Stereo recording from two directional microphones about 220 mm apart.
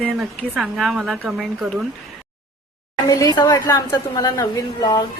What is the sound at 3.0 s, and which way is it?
A woman's voice, 15° left (ahead or behind).